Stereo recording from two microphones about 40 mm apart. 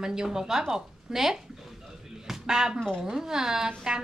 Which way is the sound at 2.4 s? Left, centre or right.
Centre.